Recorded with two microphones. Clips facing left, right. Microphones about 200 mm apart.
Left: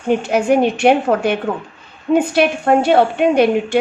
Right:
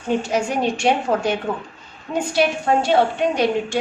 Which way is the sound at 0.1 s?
60° left (ahead or behind).